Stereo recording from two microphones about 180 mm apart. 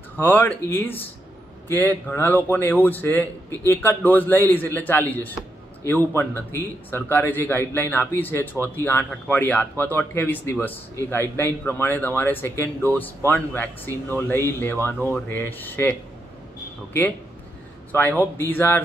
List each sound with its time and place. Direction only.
0.2 s a man's voice: 10° left (ahead or behind)
17.9 s a man's voice: 10° left (ahead or behind)